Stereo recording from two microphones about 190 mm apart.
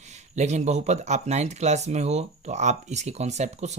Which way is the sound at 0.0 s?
40° right (ahead or behind).